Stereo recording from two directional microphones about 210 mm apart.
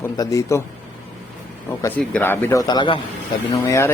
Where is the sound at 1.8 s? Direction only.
10° left (ahead or behind).